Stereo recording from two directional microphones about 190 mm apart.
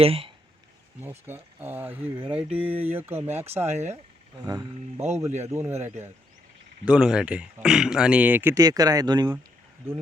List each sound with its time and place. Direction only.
0.0 s speech: 30° right (ahead or behind)
1.3 s speech: 10° right (ahead or behind)
3.8 s speech: 35° right (ahead or behind)
4.4 s speech: 20° right (ahead or behind)
6.8 s speech: 5° right (ahead or behind); by 9.3 s 20° right (ahead or behind)